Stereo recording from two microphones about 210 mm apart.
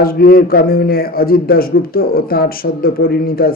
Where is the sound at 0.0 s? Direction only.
45° left (ahead or behind).